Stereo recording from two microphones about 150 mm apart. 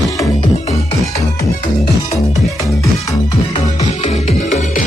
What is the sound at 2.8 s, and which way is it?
Music, 25° left (ahead or behind).